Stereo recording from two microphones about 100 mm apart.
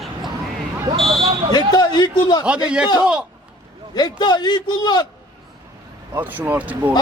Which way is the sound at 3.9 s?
45° left (ahead or behind).